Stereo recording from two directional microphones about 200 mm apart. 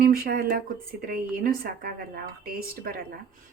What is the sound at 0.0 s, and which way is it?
A woman's voice, 50° right (ahead or behind).